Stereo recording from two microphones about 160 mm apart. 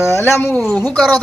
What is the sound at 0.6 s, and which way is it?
Speech, 5° left (ahead or behind).